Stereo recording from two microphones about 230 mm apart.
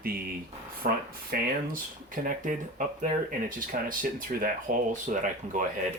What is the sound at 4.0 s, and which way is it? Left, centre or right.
Speech, right.